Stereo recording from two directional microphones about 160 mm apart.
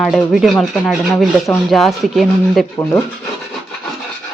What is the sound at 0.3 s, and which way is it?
A woman's voice, centre (ahead or behind).